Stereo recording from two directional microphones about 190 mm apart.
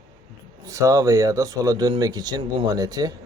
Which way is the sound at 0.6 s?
15° right (ahead or behind).